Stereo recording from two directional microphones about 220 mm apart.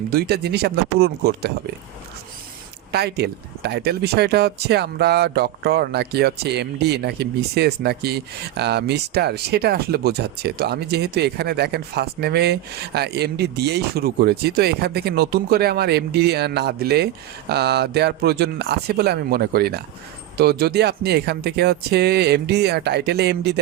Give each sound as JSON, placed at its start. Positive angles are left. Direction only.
{"t": 0.1, "sound": "speech", "side_deg": -45}
{"t": 2.9, "sound": "speech", "side_deg": -50}